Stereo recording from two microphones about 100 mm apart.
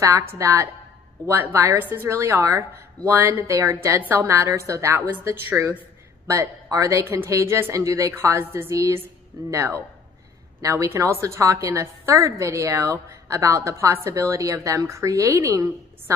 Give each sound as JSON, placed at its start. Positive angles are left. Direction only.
{"t": 0.0, "sound": "speech", "side_deg": -25}
{"t": 4.0, "sound": "a woman's voice", "side_deg": -20}